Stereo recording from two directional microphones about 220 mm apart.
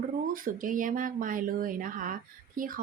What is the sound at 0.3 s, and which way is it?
Speech, 40° right (ahead or behind).